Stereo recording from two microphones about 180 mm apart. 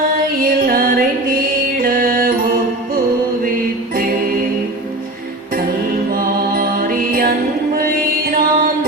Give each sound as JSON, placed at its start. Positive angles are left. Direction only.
{"t": 0.4, "sound": "music", "side_deg": -50}
{"t": 6.1, "sound": "music", "side_deg": -50}
{"t": 8.3, "sound": "mantra", "side_deg": -50}